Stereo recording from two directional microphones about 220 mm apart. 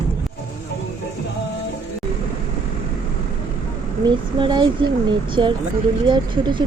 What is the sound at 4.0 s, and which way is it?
A woman's voice, 20° right (ahead or behind).